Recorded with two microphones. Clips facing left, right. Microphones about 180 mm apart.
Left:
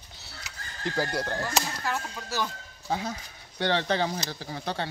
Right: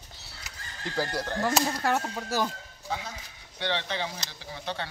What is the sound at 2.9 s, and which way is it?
Speech, 40° left (ahead or behind).